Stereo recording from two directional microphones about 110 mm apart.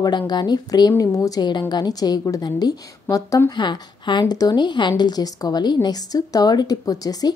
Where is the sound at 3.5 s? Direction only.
45° left (ahead or behind).